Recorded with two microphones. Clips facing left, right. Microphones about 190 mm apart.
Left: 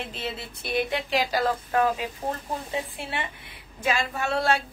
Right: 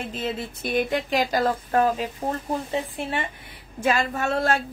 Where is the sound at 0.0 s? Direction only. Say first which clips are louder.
Right 5 dB; 45° right (ahead or behind).